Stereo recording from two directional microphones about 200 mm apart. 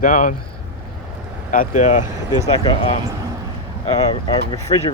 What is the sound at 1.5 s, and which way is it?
Speech, 40° left (ahead or behind).